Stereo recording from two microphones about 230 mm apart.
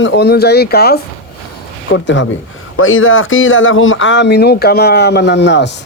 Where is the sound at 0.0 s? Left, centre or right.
Left.